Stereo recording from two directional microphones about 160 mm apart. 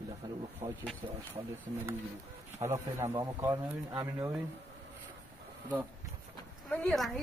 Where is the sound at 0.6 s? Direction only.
45° right (ahead or behind).